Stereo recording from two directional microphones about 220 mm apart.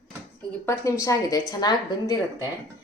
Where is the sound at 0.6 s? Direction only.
10° left (ahead or behind).